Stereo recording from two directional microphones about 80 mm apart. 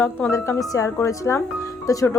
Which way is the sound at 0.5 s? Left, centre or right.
Left.